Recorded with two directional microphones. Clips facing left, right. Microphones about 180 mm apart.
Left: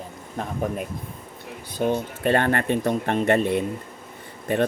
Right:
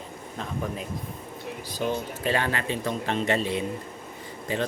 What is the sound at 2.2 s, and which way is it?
Speech, 55° left (ahead or behind).